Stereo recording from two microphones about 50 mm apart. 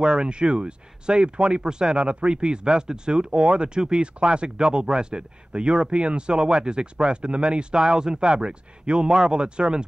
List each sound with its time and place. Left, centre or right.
0.0 s speech: centre